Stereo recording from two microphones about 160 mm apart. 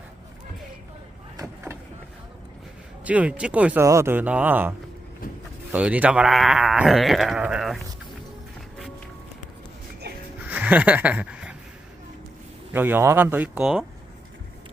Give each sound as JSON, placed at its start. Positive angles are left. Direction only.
{"t": 1.4, "sound": "vehicle", "side_deg": -15}
{"t": 3.0, "sound": "speech", "side_deg": -10}
{"t": 5.2, "sound": "vehicle", "side_deg": 60}
{"t": 5.7, "sound": "speech", "side_deg": -10}
{"t": 10.4, "sound": "a sound", "side_deg": -10}
{"t": 12.7, "sound": "speech", "side_deg": -10}